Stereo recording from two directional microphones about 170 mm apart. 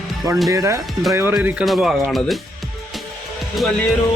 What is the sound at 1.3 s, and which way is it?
Speech, centre (ahead or behind).